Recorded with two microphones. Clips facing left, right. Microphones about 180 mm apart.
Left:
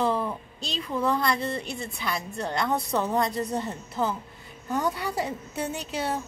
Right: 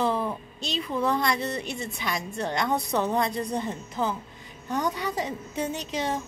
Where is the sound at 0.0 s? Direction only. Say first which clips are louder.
Even; 5° right (ahead or behind).